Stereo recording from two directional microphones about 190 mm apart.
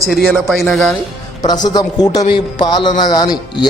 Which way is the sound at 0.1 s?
Centre (ahead or behind).